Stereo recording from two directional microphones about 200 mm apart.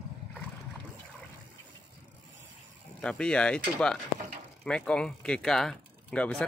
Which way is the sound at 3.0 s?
5° left (ahead or behind).